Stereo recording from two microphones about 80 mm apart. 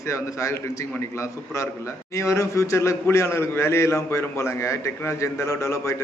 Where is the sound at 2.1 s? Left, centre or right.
Left.